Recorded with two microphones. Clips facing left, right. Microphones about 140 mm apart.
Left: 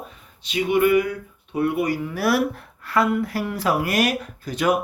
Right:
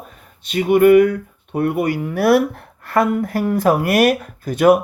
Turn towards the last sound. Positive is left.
turn(degrees=-50)  # may be behind; listen again after turning